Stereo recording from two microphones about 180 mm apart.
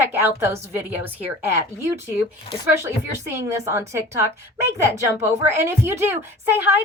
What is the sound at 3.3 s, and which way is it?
Speech, 15° right (ahead or behind).